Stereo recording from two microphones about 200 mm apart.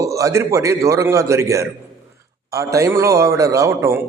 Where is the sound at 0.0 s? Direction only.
15° right (ahead or behind).